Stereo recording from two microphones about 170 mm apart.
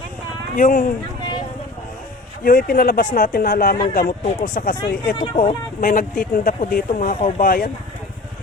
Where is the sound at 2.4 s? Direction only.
60° left (ahead or behind).